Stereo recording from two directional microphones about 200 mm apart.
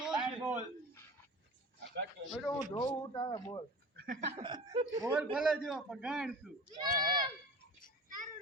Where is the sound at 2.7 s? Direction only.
25° left (ahead or behind).